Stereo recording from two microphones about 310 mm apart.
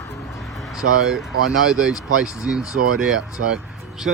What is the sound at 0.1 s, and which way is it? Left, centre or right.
Speech, centre.